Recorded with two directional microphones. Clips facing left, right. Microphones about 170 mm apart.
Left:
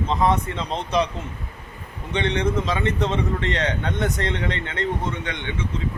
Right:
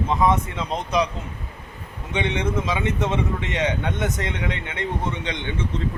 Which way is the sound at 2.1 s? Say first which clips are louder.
Left 1 dB; 10° right (ahead or behind).